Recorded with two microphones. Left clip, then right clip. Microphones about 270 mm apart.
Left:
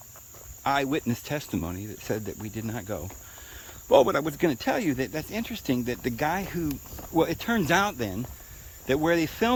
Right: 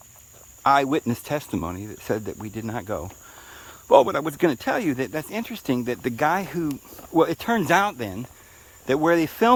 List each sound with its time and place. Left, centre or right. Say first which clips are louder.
0.6 s speech: right 7 dB; centre